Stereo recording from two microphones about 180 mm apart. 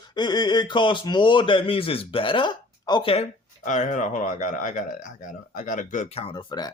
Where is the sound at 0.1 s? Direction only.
25° left (ahead or behind).